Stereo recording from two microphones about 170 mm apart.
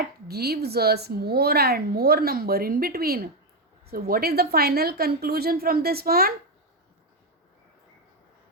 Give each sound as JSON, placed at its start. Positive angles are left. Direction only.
{"t": 0.3, "sound": "a woman's voice", "side_deg": -70}